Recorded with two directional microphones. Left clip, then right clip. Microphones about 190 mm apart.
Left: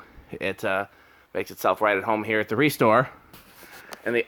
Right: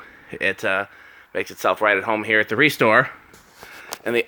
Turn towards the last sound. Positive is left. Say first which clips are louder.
# right 3 dB
turn(degrees=-20)  # may be behind; listen again after turning